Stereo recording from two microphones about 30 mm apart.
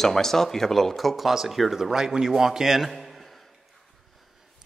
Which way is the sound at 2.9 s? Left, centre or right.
Centre.